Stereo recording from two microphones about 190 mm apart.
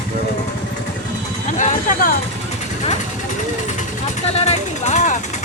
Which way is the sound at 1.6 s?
45° left (ahead or behind).